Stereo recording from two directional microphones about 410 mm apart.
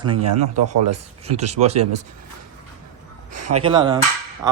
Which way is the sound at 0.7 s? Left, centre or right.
Right.